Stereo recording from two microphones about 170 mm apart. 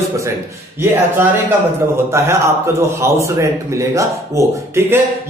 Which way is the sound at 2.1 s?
15° right (ahead or behind).